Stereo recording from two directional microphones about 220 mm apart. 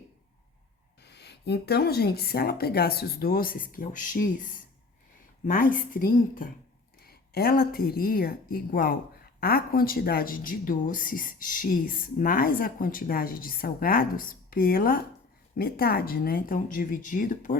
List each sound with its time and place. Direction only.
1.0 s a woman's voice: 50° left (ahead or behind)